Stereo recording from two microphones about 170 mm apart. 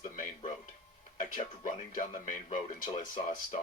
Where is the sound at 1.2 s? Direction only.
50° left (ahead or behind).